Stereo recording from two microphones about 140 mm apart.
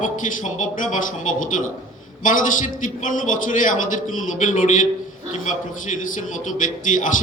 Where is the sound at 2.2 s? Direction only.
65° left (ahead or behind).